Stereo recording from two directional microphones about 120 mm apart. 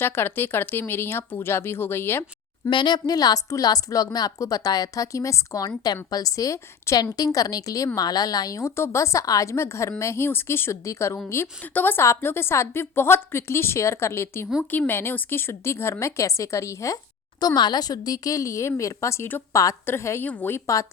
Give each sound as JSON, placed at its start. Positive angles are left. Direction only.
{"t": 0.0, "sound": "a woman's voice", "side_deg": 20}
{"t": 2.6, "sound": "a woman's voice", "side_deg": 40}
{"t": 17.4, "sound": "a woman's voice", "side_deg": 35}